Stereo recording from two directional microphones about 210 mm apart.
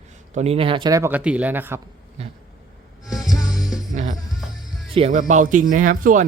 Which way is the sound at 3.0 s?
Centre (ahead or behind).